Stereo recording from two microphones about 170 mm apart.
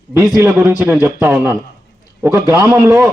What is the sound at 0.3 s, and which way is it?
A man's voice, 10° right (ahead or behind).